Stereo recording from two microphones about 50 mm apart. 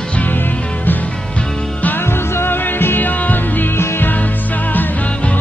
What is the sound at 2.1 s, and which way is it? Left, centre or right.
Music, left.